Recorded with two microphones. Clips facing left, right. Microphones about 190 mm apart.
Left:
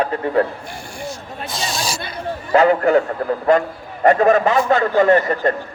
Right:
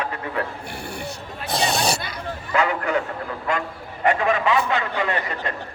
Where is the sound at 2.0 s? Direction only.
30° left (ahead or behind).